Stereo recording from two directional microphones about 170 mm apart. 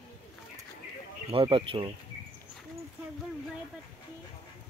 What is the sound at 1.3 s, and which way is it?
Speech, 30° right (ahead or behind).